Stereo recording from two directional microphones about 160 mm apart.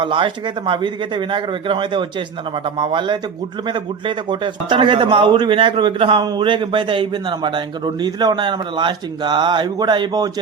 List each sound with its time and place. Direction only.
0.0 s a man's voice: 30° right (ahead or behind)